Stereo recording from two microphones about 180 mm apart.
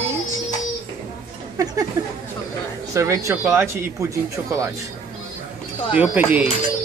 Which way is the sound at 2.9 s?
15° right (ahead or behind).